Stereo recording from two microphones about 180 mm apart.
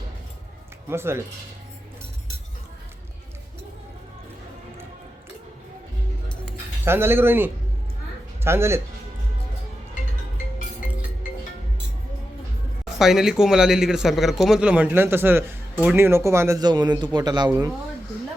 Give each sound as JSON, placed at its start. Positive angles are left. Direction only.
{"t": 0.9, "sound": "speech", "side_deg": -15}
{"t": 6.8, "sound": "speech", "side_deg": -10}
{"t": 12.8, "sound": "speech", "side_deg": 0}